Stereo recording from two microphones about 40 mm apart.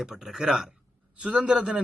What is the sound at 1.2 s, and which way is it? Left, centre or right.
Speech, right.